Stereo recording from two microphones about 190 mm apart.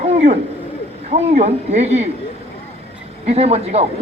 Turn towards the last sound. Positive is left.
turn(degrees=-35)  # may be behind; listen again after turning